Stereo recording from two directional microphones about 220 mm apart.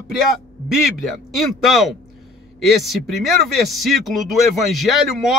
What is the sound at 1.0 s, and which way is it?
A woman's voice, centre (ahead or behind).